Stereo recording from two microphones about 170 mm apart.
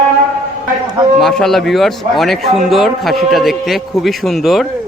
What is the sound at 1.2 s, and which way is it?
A man's voice, 5° left (ahead or behind).